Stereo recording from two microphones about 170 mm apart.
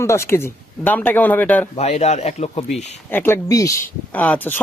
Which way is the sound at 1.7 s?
40° left (ahead or behind).